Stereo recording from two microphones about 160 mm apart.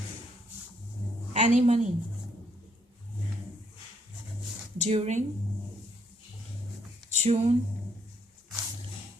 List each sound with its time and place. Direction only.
1.3 s a woman's voice: 45° right (ahead or behind)
4.8 s speech: 45° right (ahead or behind)
7.1 s speech: 45° right (ahead or behind)